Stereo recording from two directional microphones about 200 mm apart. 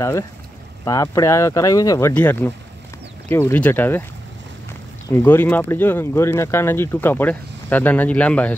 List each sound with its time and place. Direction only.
0.8 s speech: 15° left (ahead or behind)
5.1 s speech: 10° left (ahead or behind)